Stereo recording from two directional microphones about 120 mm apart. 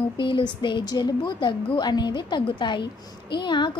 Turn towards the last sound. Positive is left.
turn(degrees=40)  # may be behind; listen again after turning